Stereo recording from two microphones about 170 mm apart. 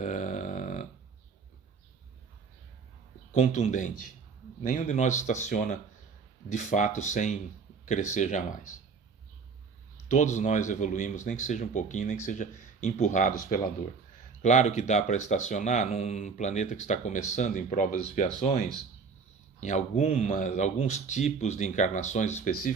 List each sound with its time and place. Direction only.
0.0 s a sound: 45° left (ahead or behind)
3.3 s speech: 45° left (ahead or behind)
10.1 s speech: 45° left (ahead or behind)
19.5 s speech: 45° left (ahead or behind)